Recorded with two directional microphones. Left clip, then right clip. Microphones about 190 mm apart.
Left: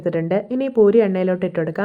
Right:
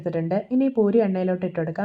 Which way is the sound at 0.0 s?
25° left (ahead or behind).